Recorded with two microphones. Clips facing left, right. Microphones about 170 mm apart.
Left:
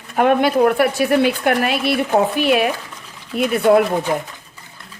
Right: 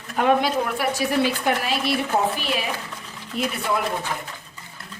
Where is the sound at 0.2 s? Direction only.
60° left (ahead or behind).